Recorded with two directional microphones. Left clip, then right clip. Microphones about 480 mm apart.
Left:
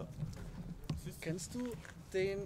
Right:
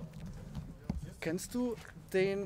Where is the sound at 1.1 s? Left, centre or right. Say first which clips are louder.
Right 7 dB; right.